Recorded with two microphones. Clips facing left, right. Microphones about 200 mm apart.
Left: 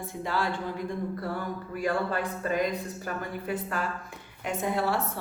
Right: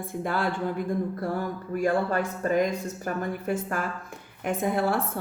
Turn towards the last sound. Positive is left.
turn(degrees=-50)  # may be behind; listen again after turning